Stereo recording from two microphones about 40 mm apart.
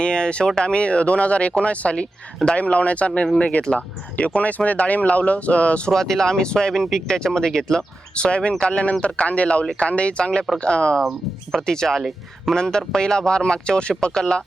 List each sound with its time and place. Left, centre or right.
0.0 s speech: left
5.9 s speech: centre
8.3 s speech: left
11.5 s speech: centre
11.9 s speech: centre
12.5 s speech: centre